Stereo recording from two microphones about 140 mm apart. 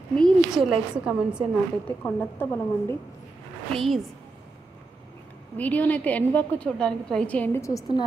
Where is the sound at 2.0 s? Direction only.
15° left (ahead or behind).